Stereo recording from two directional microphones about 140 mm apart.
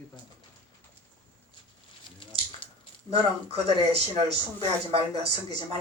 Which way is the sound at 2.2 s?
35° left (ahead or behind).